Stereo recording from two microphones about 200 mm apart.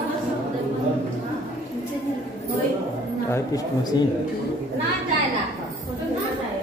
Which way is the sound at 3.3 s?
20° left (ahead or behind).